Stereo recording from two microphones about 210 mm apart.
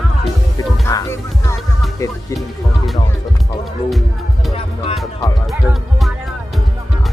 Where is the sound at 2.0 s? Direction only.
15° left (ahead or behind).